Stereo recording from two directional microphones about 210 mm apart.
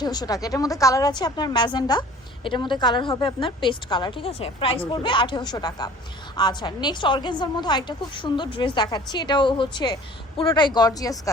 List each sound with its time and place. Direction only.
0.0 s a woman's voice: 20° left (ahead or behind)